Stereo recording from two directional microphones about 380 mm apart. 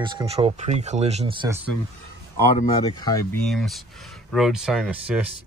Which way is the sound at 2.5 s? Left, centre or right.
Centre.